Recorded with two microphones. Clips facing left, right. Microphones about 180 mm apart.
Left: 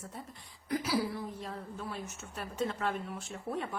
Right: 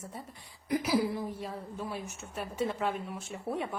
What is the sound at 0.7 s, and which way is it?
A woman's voice, 15° right (ahead or behind).